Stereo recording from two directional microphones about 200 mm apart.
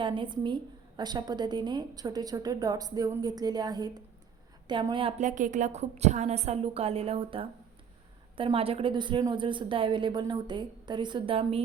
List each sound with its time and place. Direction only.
0.0 s a woman's voice: 25° right (ahead or behind)